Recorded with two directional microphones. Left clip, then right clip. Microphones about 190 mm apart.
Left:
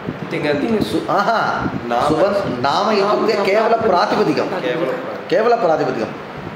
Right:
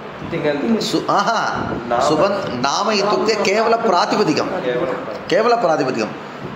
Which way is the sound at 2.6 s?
65° right (ahead or behind).